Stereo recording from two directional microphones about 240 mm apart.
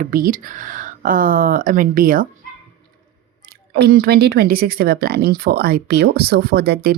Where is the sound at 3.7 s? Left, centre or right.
Right.